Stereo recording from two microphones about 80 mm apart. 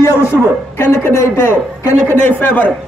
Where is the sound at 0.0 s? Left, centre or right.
Left.